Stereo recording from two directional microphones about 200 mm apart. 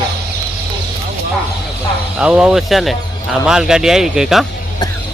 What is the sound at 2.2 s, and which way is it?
Speech, 5° right (ahead or behind).